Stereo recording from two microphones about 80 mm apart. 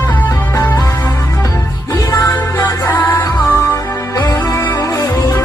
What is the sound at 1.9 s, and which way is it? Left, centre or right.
Music, left.